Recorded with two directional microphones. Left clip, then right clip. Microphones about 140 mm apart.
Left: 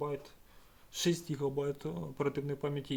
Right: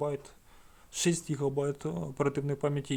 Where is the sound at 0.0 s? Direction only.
50° right (ahead or behind).